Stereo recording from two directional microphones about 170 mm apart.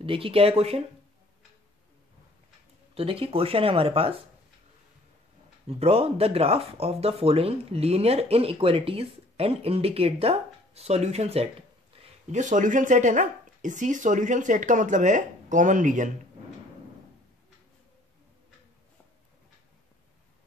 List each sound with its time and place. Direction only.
0.0 s speech: 30° right (ahead or behind)
2.9 s speech: 35° right (ahead or behind)
5.7 s speech: 35° right (ahead or behind)